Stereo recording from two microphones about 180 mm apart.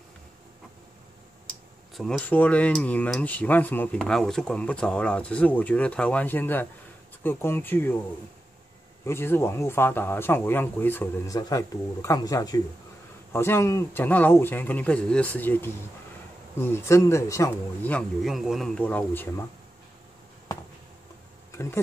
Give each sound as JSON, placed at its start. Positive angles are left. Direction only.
{"t": 2.0, "sound": "speech", "side_deg": 5}
{"t": 9.0, "sound": "speech", "side_deg": 15}
{"t": 17.9, "sound": "speech", "side_deg": 0}